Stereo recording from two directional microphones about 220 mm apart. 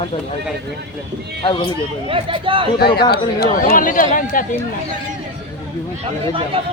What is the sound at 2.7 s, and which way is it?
Speech, 45° left (ahead or behind).